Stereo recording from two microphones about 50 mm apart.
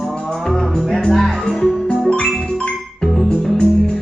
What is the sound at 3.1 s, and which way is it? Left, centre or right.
Music, centre.